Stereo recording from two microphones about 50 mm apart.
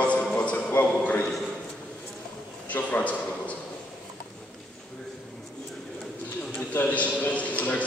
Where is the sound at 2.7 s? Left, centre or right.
Left.